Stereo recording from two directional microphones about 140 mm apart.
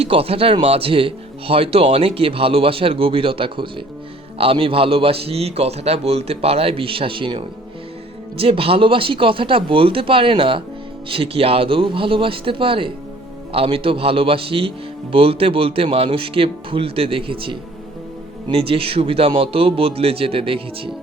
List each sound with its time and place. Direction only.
0.0 s a man's voice: 45° right (ahead or behind)